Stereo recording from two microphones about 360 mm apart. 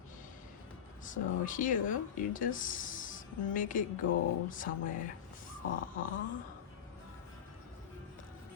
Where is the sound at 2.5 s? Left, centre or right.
Left.